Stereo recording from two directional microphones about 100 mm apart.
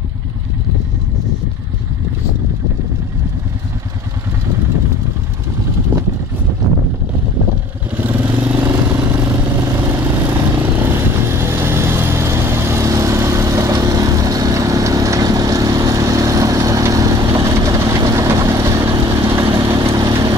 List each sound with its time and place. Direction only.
8.0 s vehicle: 20° right (ahead or behind); by 20.3 s 35° right (ahead or behind)